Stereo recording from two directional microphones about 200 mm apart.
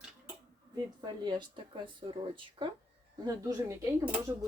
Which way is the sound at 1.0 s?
20° right (ahead or behind).